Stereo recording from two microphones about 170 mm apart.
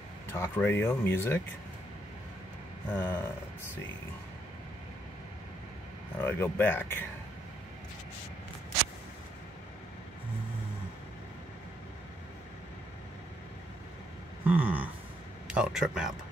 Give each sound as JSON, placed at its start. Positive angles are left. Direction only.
{"t": 0.3, "sound": "speech", "side_deg": 15}
{"t": 2.9, "sound": "speech", "side_deg": 10}
{"t": 6.2, "sound": "speech", "side_deg": 10}
{"t": 14.4, "sound": "a sound", "side_deg": -10}
{"t": 15.4, "sound": "speech", "side_deg": -5}